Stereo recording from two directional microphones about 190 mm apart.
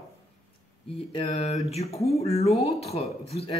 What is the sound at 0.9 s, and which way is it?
Speech, 30° left (ahead or behind).